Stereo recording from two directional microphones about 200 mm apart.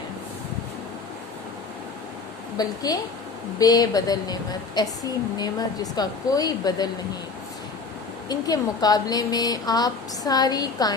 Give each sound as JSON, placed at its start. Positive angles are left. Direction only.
{"t": 2.6, "sound": "a woman's voice", "side_deg": 20}
{"t": 8.3, "sound": "a woman's voice", "side_deg": 20}